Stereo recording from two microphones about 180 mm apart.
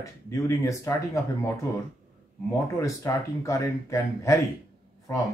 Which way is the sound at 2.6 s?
15° left (ahead or behind).